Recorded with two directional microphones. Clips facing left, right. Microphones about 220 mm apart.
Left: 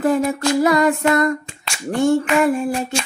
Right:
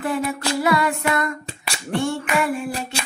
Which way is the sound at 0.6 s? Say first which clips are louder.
Left 5 dB; 45° left (ahead or behind).